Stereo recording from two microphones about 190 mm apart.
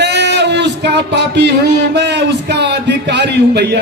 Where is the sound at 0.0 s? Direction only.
65° right (ahead or behind).